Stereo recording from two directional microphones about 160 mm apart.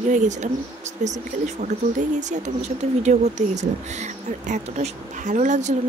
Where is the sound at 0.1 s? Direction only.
50° right (ahead or behind).